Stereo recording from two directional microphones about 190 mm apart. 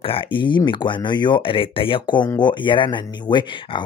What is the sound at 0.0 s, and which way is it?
Speech, 25° left (ahead or behind).